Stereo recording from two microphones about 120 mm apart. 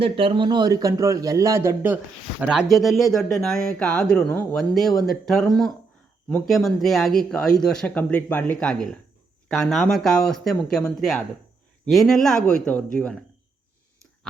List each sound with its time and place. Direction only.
0.0 s a man's voice: 50° right (ahead or behind); by 2.0 s 20° right (ahead or behind)
2.4 s speech: 5° right (ahead or behind); by 12.8 s 10° left (ahead or behind)